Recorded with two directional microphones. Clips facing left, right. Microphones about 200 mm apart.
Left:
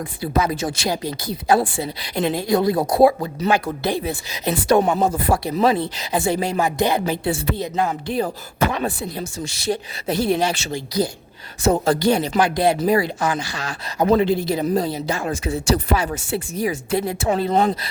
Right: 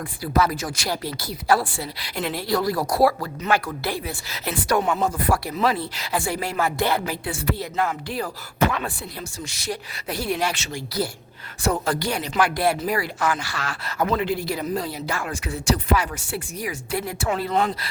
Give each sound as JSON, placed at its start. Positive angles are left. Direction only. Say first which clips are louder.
{"t": 0.2, "sound": "speech", "louder": "left 1 dB", "side_deg": 20}
{"t": 4.8, "sound": "speech", "louder": "left 5 dB", "side_deg": 35}
{"t": 5.0, "sound": "speech", "louder": "left 3 dB", "side_deg": 20}
{"t": 14.1, "sound": "speech", "louder": "left 9 dB", "side_deg": 30}